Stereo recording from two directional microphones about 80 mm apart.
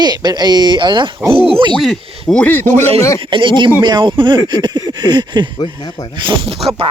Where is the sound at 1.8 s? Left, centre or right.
Centre.